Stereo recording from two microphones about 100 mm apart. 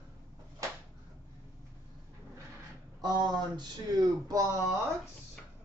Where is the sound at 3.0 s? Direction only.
45° right (ahead or behind).